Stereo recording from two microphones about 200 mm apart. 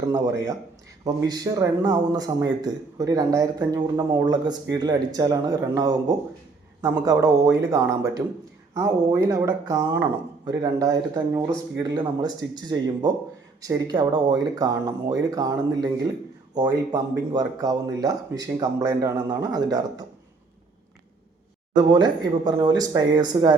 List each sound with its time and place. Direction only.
1.0 s speech: 20° right (ahead or behind)
7.0 s speech: 15° right (ahead or behind)
21.8 s speech: 20° right (ahead or behind)